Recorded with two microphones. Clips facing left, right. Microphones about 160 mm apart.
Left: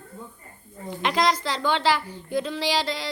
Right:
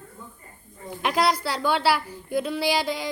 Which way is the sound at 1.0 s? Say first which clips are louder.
Even; 10° right (ahead or behind).